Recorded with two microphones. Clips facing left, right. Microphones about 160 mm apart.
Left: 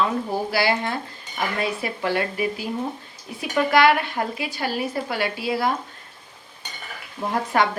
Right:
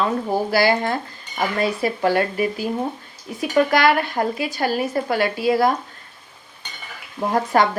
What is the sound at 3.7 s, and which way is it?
A woman's voice, 40° right (ahead or behind).